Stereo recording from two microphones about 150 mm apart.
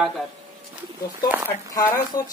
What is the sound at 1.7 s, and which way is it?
Speech, 25° left (ahead or behind).